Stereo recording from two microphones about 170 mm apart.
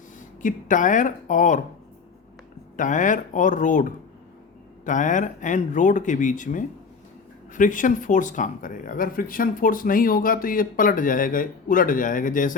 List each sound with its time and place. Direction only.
0.4 s speech: 50° left (ahead or behind)
2.7 s speech: 50° left (ahead or behind)